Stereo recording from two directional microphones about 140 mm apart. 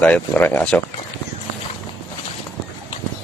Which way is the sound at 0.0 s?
10° left (ahead or behind).